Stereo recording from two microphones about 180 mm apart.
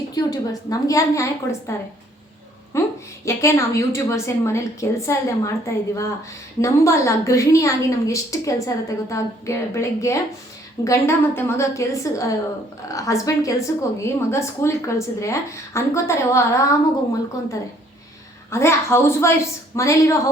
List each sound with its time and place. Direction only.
0.1 s a woman's voice: 20° left (ahead or behind)
2.7 s a sound: 15° left (ahead or behind)
3.2 s a woman's voice: 15° left (ahead or behind)
18.5 s a woman's voice: 15° left (ahead or behind)